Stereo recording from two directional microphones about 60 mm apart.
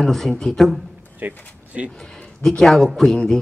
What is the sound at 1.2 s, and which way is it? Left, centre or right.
Speech, right.